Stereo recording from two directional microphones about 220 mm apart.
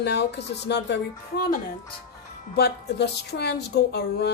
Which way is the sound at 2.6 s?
50° left (ahead or behind).